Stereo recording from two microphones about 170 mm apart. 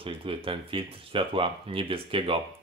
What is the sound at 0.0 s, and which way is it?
Speech, 30° right (ahead or behind).